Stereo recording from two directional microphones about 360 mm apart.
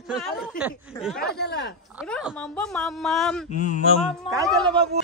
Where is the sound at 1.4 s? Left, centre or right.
Left.